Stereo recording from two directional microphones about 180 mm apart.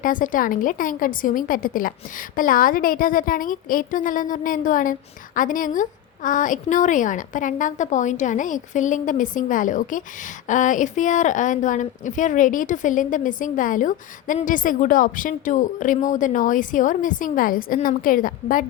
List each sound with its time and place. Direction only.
0.0 s a woman's voice: 50° left (ahead or behind)